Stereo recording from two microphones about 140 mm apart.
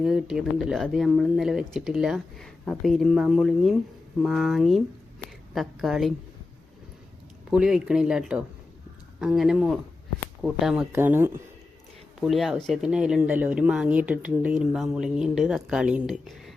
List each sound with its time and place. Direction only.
0.0 s speech: 5° right (ahead or behind)
7.5 s speech: 5° right (ahead or behind)
10.9 s speech: 15° right (ahead or behind)
12.2 s speech: centre (ahead or behind)
16.1 s speech: 5° left (ahead or behind)